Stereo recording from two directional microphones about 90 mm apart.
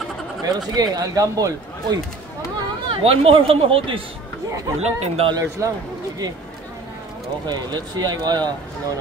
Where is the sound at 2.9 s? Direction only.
90° right.